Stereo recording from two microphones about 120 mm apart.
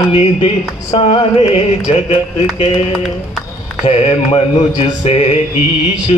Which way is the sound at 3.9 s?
55° left (ahead or behind).